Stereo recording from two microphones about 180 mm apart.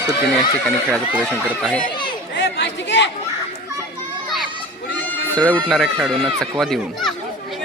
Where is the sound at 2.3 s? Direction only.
70° left (ahead or behind).